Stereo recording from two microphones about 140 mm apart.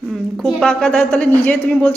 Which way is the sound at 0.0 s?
Centre (ahead or behind).